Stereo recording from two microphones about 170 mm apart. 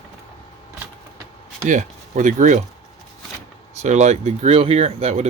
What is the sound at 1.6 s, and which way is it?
Speech, 50° right (ahead or behind).